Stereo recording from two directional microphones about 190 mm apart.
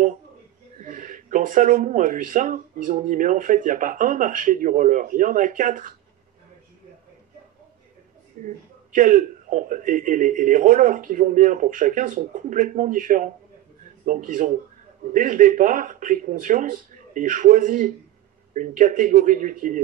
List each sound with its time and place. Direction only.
0.7 s speech: 45° right (ahead or behind)
8.9 s speech: 45° right (ahead or behind)